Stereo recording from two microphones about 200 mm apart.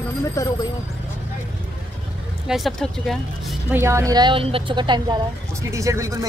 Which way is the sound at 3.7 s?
15° right (ahead or behind).